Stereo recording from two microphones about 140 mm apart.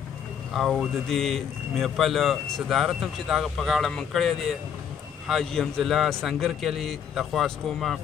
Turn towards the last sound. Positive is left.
turn(degrees=0)  # may be behind; listen again after turning